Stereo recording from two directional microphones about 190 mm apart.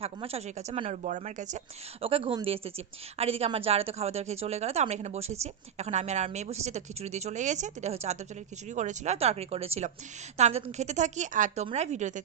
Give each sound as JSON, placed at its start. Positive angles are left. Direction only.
{"t": 0.0, "sound": "a woman's voice", "side_deg": -30}